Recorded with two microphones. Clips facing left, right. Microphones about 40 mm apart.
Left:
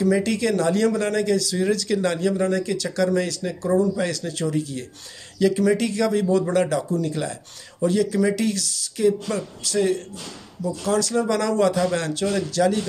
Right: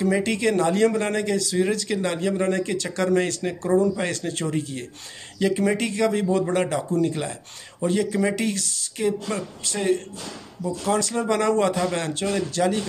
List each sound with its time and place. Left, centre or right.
0.0 s a man's voice: right